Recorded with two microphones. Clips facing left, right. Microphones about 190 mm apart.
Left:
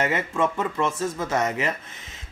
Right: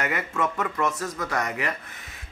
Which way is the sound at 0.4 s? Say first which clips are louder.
Left 2 dB; 30° left (ahead or behind).